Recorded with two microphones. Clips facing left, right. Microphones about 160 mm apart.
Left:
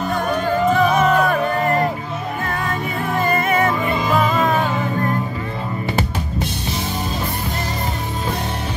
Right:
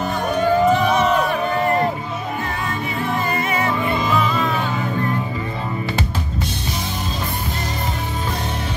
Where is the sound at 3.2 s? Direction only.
50° left (ahead or behind).